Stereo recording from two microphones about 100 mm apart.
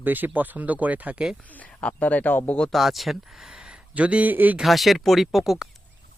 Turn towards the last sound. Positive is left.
turn(degrees=-5)  # may be behind; listen again after turning